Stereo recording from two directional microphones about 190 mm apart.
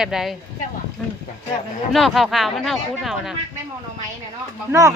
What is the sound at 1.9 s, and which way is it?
Speech, centre (ahead or behind).